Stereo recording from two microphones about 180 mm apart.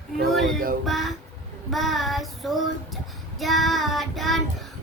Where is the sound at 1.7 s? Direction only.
Centre (ahead or behind).